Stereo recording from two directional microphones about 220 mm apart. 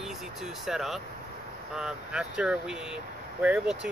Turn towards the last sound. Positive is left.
turn(degrees=-5)  # may be behind; listen again after turning